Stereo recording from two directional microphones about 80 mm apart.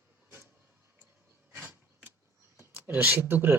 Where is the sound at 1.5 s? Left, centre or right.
Right.